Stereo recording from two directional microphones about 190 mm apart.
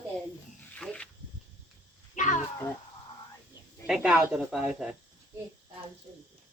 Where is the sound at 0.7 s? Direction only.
5° left (ahead or behind).